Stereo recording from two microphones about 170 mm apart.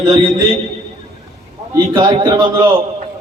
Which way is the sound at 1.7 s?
25° right (ahead or behind).